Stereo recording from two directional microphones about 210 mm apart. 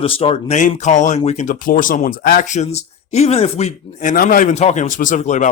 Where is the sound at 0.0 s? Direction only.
25° left (ahead or behind).